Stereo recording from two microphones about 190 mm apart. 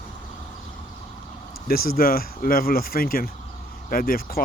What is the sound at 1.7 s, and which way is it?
Speech, 50° left (ahead or behind).